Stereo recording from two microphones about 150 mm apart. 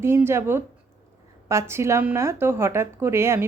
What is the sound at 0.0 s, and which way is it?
A woman's voice, 15° right (ahead or behind).